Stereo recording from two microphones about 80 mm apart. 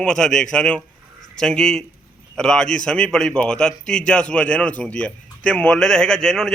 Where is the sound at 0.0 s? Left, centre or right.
Centre.